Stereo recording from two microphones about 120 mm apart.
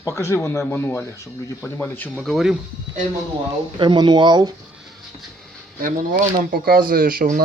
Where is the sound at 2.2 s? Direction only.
Centre (ahead or behind).